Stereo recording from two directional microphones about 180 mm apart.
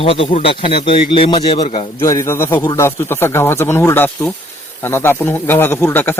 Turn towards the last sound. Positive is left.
turn(degrees=10)  # may be behind; listen again after turning